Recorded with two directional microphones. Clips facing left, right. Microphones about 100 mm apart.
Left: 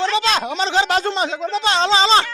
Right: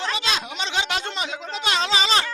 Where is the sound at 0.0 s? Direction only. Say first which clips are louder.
Left 8 dB; 40° left (ahead or behind).